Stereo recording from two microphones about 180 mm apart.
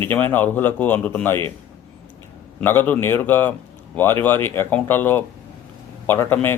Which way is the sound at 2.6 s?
10° left (ahead or behind).